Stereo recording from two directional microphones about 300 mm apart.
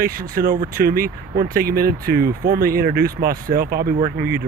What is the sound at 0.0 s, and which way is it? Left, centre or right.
Speech, right.